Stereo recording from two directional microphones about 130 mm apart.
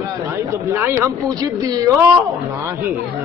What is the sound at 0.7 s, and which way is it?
A man's voice, 20° right (ahead or behind).